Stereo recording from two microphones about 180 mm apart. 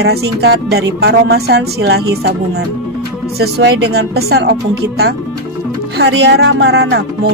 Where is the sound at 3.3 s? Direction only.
65° right (ahead or behind).